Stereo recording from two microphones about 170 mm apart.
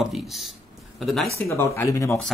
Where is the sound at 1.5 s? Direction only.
15° left (ahead or behind).